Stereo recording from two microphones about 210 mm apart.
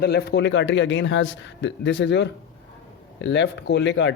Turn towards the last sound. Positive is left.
turn(degrees=60)  # may be behind; listen again after turning